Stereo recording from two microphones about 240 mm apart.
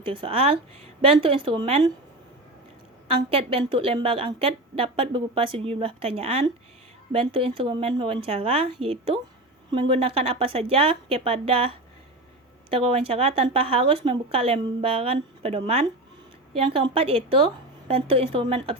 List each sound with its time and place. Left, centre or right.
0.1 s a woman's voice: right
3.2 s a woman's voice: right